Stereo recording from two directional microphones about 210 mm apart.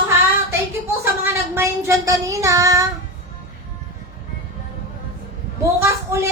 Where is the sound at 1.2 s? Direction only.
10° right (ahead or behind).